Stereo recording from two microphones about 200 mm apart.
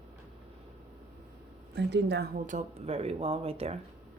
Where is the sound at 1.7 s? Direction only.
60° right (ahead or behind); by 3.8 s 30° right (ahead or behind).